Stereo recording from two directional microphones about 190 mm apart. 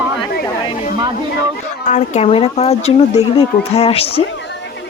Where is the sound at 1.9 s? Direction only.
40° left (ahead or behind).